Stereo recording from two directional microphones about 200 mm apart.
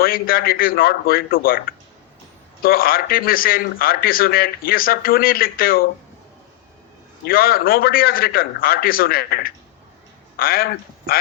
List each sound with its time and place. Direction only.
0.0 s speech: 45° left (ahead or behind)
7.3 s a man's voice: 45° left (ahead or behind)